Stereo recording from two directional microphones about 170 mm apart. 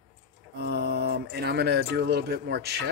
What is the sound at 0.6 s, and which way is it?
A man's voice, 75° right (ahead or behind).